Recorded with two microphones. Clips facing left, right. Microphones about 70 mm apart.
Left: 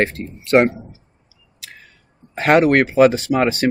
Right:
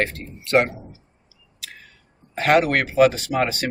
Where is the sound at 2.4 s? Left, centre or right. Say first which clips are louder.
Left 4 dB; left.